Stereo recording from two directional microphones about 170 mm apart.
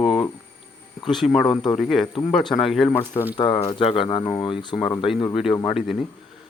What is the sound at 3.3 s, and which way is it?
Speech, 25° left (ahead or behind).